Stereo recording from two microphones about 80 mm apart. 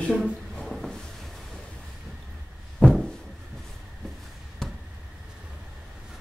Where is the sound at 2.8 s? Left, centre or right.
Centre.